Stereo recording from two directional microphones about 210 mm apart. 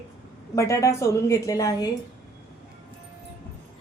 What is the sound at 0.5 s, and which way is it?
A woman's voice, 15° left (ahead or behind).